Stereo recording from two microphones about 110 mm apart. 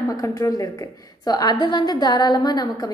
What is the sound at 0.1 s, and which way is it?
A woman's voice, 35° left (ahead or behind).